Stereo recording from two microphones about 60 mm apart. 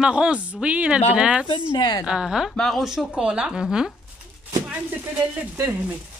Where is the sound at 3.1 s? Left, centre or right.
Centre.